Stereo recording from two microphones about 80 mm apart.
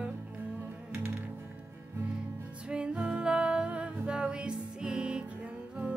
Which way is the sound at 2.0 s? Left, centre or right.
Centre.